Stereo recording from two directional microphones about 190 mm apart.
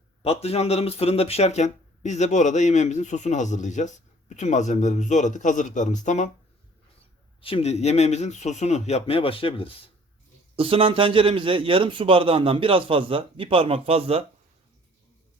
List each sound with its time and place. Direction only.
0.2 s speech: 30° left (ahead or behind)
7.4 s speech: 30° left (ahead or behind)
10.5 s a man's voice: 30° right (ahead or behind)